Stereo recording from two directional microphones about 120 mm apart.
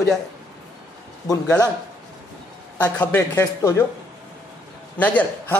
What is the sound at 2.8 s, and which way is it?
A man's voice, 15° left (ahead or behind).